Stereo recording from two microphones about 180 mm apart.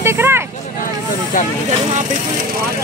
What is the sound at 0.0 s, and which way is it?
Vehicle, 10° right (ahead or behind).